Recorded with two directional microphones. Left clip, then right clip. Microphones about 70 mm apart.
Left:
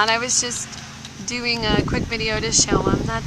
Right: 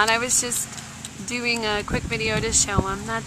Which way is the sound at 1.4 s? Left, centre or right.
Centre.